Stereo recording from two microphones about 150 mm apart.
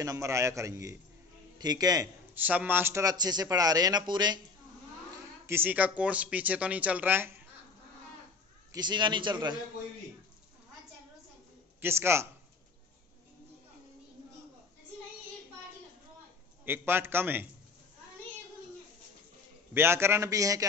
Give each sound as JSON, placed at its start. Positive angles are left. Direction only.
{"t": 0.0, "sound": "speech", "side_deg": -20}
{"t": 2.3, "sound": "speech", "side_deg": -10}
{"t": 5.5, "sound": "speech", "side_deg": -10}
{"t": 8.7, "sound": "speech", "side_deg": -30}
{"t": 11.8, "sound": "speech", "side_deg": -15}
{"t": 16.6, "sound": "speech", "side_deg": -15}
{"t": 19.7, "sound": "speech", "side_deg": -15}